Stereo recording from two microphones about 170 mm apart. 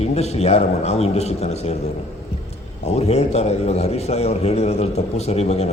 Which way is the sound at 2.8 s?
40° left (ahead or behind).